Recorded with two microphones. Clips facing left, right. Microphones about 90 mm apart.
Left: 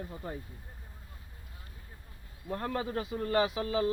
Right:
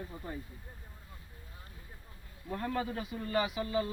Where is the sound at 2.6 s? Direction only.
60° left (ahead or behind).